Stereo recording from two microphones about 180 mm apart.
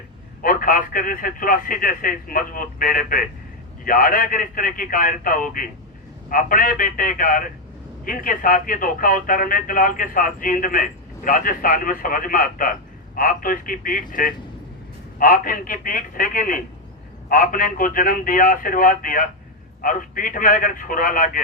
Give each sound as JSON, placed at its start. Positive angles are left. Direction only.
{"t": 0.4, "sound": "speech", "side_deg": 50}